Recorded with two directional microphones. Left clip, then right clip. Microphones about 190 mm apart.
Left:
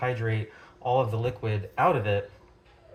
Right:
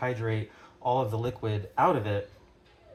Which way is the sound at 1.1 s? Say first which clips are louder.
Left 2 dB; 40° right (ahead or behind).